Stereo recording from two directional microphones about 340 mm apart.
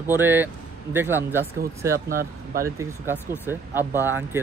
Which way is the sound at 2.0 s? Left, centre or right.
Right.